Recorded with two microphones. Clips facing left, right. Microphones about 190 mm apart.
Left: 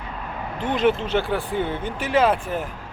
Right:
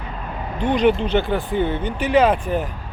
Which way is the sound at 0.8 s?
5° left (ahead or behind).